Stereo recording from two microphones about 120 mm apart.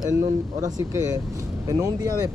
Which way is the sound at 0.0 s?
30° right (ahead or behind).